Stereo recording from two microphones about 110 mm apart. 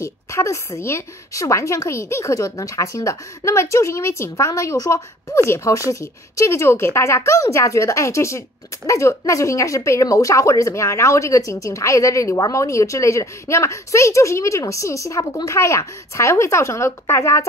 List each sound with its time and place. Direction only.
0.0 s speech: 25° left (ahead or behind)